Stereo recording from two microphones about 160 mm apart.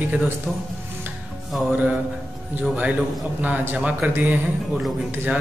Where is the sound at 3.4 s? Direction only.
10° right (ahead or behind).